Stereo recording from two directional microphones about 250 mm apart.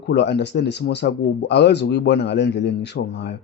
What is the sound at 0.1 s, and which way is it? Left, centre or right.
Speech, left.